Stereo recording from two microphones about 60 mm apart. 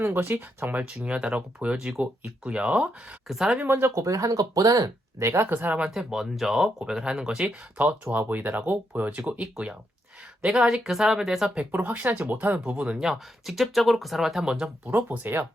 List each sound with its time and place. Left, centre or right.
0.0 s speech: right
0.9 s speech: centre
3.2 s speech: centre
3.7 s speech: right
5.2 s speech: right
5.5 s speech: right
5.8 s speech: centre
7.4 s speech: right; by 11.5 s centre
11.7 s speech: right
13.0 s speech: centre
14.8 s speech: right